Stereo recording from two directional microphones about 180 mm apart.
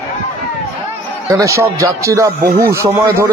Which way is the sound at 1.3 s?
15° right (ahead or behind).